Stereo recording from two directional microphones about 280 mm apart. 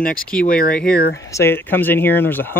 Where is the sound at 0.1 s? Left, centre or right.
Centre.